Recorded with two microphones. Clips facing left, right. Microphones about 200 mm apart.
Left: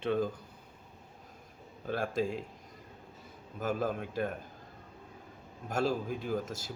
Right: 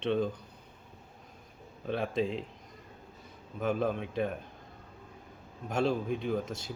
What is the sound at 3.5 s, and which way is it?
Speech, centre (ahead or behind).